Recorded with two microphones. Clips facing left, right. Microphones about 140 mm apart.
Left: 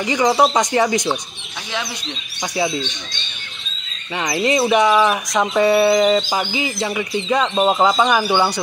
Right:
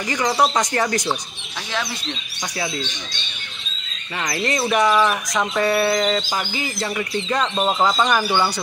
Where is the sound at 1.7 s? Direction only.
Centre (ahead or behind).